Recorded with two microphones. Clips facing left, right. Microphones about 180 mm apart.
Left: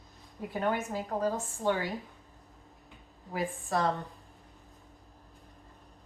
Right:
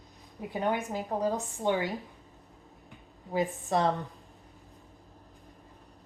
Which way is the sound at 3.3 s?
20° right (ahead or behind).